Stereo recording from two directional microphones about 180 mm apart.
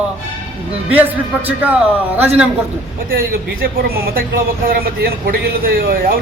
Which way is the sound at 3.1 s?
55° right (ahead or behind).